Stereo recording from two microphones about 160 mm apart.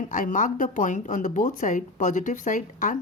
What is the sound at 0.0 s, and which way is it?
A woman's voice, 55° left (ahead or behind).